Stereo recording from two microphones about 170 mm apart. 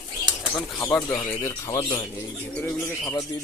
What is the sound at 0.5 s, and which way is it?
Speech, 5° left (ahead or behind).